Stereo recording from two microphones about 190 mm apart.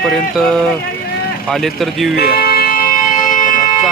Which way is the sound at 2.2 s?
55° left (ahead or behind).